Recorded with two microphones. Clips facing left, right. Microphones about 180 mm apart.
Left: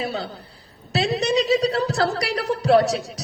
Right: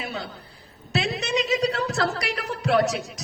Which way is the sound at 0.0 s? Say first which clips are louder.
Left 5 dB; 35° left (ahead or behind).